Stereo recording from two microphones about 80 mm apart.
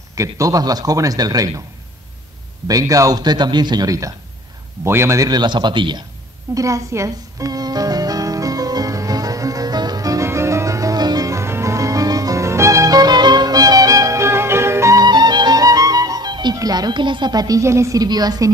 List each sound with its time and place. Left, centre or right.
0.1 s a man's voice: right
2.7 s a man's voice: right
4.8 s a woman's voice: right
5.2 s a man's voice: right
6.5 s music: right
10.2 s music: right
11.3 s music: right
15.0 s music: right
16.5 s speech: right
17.6 s a woman's voice: right
18.0 s speech: right